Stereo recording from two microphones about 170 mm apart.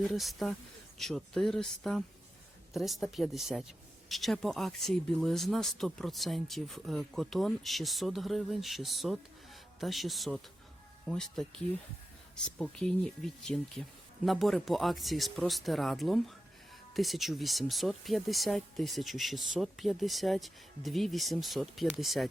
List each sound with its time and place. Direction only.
0.0 s speech: centre (ahead or behind)
12.5 s speech: 5° left (ahead or behind)